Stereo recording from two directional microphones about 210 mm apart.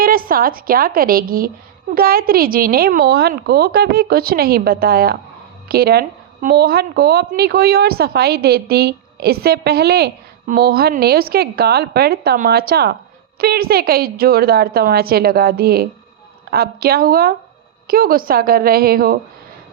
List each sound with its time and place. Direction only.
0.0 s a woman's voice: 45° right (ahead or behind)